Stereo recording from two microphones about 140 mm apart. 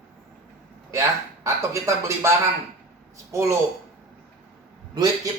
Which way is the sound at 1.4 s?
20° right (ahead or behind).